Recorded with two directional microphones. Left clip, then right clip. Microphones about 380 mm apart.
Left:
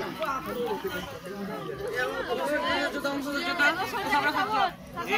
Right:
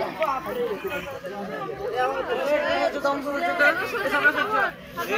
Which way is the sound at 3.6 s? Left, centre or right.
Centre.